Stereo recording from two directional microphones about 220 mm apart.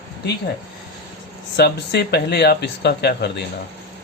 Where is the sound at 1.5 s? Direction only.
50° left (ahead or behind).